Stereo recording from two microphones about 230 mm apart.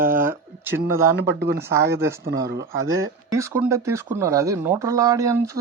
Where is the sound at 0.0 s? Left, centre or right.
Right.